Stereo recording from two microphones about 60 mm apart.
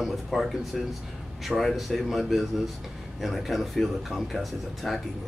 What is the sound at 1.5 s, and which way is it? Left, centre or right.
A man's voice, centre.